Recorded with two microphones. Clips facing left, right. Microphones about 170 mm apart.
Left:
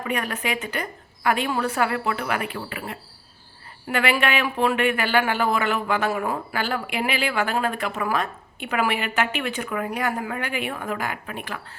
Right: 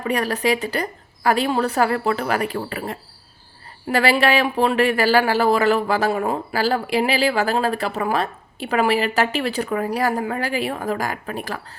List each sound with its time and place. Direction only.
0.0 s speech: 35° right (ahead or behind)